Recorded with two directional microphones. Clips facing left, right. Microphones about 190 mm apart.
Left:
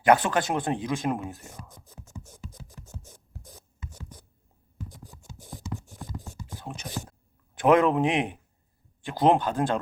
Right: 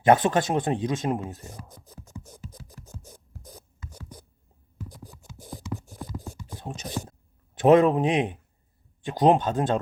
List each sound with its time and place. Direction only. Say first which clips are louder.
0.0 s speech: right 2 dB; 20° right (ahead or behind)
1.5 s scratch: right 2 dB; 35° right (ahead or behind)
5.0 s scratch: right 4 dB; 40° right (ahead or behind)
6.6 s speech: right 3 dB; 25° right (ahead or behind)